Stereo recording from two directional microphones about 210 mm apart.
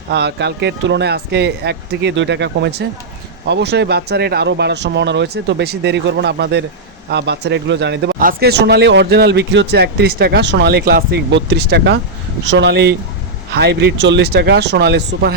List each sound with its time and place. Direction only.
0.1 s a man's voice: 50° right (ahead or behind)